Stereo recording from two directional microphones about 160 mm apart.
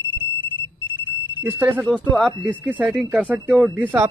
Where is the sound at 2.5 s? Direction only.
10° right (ahead or behind).